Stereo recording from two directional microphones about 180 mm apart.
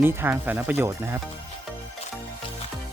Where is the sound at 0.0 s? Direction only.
10° right (ahead or behind).